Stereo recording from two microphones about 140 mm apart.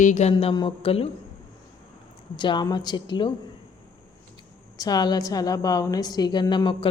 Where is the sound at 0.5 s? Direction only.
35° left (ahead or behind).